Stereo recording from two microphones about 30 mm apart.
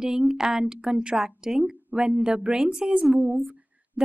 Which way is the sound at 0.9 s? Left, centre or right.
Right.